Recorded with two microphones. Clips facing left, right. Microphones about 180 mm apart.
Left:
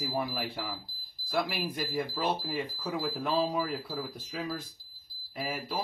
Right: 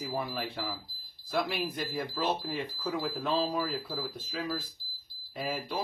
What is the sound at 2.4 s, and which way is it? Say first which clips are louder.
Speech: even; 5° left (ahead or behind).